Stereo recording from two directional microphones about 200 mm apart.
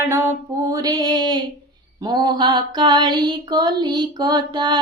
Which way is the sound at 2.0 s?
20° right (ahead or behind).